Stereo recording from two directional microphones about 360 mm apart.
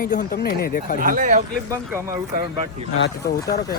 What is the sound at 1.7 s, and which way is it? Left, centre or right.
Speech, centre.